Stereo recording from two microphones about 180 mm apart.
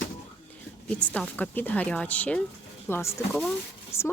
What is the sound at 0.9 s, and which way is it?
Speech, 5° left (ahead or behind).